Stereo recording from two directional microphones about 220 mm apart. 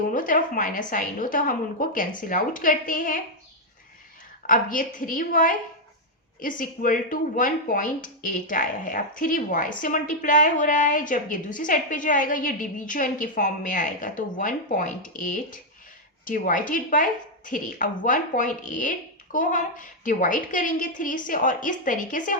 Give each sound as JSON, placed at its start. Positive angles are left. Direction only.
{"t": 0.1, "sound": "speech", "side_deg": 40}
{"t": 4.4, "sound": "speech", "side_deg": 40}